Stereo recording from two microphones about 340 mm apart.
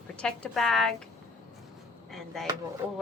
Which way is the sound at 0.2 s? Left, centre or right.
Centre.